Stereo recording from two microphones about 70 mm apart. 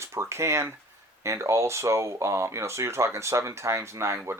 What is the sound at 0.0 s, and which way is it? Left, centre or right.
Speech, right.